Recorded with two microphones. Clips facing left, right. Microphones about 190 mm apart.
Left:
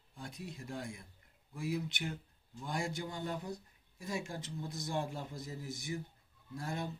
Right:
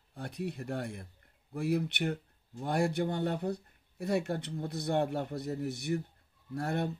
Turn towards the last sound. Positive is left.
turn(degrees=-65)  # may be behind; listen again after turning